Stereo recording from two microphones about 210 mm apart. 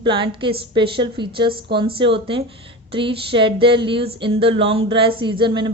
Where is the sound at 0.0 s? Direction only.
25° right (ahead or behind).